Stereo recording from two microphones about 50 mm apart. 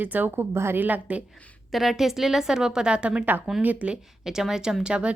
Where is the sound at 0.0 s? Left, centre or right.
Right.